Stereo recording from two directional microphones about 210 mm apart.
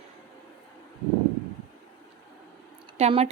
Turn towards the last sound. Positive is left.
turn(degrees=-30)  # may be behind; listen again after turning